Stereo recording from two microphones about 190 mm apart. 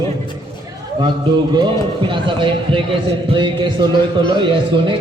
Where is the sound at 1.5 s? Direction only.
25° right (ahead or behind).